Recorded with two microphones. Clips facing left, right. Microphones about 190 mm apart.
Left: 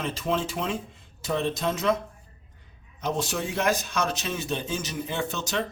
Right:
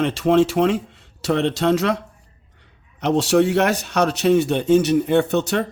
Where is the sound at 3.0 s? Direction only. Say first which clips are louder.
Right 12 dB; 75° right (ahead or behind).